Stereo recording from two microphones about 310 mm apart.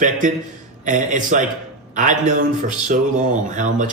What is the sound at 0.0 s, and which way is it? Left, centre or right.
Speech, right.